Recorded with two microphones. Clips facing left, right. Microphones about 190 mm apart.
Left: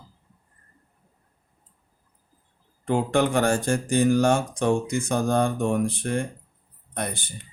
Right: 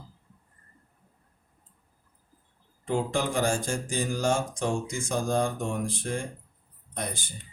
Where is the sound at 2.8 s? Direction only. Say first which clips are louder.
Left 6 dB; 60° left (ahead or behind).